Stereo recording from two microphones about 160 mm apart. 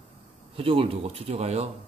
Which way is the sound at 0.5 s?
35° right (ahead or behind).